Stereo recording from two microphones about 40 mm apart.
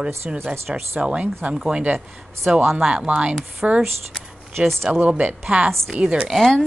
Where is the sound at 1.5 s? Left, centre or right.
Centre.